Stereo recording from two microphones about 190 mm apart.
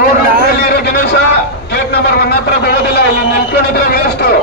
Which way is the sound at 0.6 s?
55° left (ahead or behind).